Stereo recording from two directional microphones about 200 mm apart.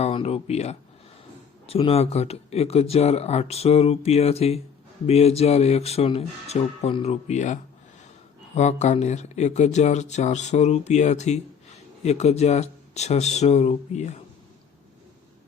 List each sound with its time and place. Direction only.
0.0 s speech: 30° left (ahead or behind)